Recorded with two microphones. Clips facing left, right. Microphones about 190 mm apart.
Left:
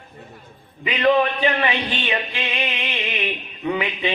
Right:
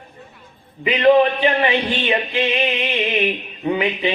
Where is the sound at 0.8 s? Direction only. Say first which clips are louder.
Right 5 dB; 35° right (ahead or behind).